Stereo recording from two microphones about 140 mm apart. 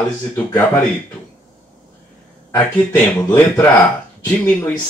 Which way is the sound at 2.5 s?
10° left (ahead or behind).